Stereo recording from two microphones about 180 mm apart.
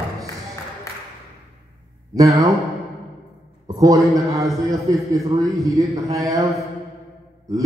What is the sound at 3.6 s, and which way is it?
Speech, 20° right (ahead or behind).